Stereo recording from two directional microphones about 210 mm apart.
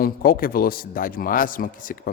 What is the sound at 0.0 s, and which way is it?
Speech, 45° left (ahead or behind).